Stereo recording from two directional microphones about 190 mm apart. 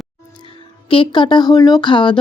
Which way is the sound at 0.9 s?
25° left (ahead or behind).